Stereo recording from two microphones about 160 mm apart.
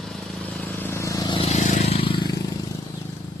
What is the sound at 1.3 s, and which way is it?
Vehicle, 40° left (ahead or behind).